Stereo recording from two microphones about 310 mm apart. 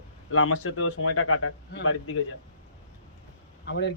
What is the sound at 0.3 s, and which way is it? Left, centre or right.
Speech, left.